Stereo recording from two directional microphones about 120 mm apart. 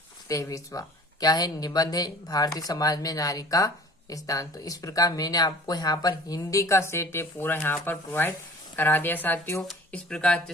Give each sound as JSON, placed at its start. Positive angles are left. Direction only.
{"t": 0.3, "sound": "speech", "side_deg": 25}
{"t": 9.6, "sound": "speech", "side_deg": 5}